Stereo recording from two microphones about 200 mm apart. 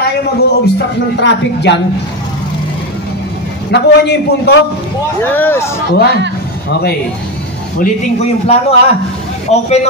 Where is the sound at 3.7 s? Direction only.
55° left (ahead or behind).